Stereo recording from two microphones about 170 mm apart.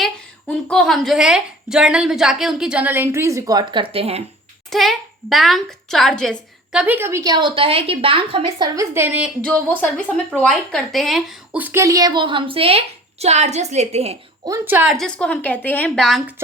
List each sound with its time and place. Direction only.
0.0 s a woman's voice: 5° left (ahead or behind); by 4.2 s 35° right (ahead or behind)
4.7 s speech: centre (ahead or behind)
10.3 s a woman's voice: 5° left (ahead or behind); by 14.2 s 35° right (ahead or behind)
14.4 s speech: 15° right (ahead or behind)
14.9 s a woman's voice: 5° left (ahead or behind)